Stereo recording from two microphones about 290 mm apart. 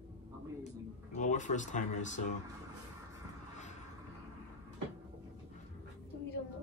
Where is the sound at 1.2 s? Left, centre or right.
Left.